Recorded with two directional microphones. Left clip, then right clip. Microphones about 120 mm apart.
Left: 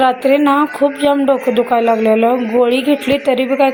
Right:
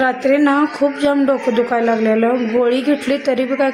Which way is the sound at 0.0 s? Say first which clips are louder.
Left 3 dB; 20° left (ahead or behind).